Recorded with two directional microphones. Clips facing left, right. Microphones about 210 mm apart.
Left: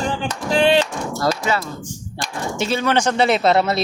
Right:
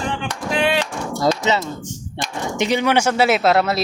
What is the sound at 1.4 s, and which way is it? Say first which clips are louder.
Speech: right 2 dB; 20° right (ahead or behind).